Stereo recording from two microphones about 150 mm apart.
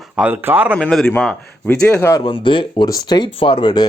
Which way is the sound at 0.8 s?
5° left (ahead or behind).